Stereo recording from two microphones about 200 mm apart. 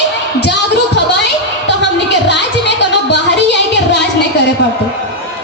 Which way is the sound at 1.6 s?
60° left (ahead or behind).